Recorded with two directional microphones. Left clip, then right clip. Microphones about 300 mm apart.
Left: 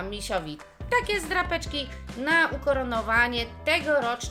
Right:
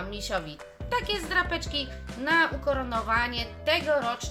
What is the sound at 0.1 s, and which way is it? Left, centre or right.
Speech, centre.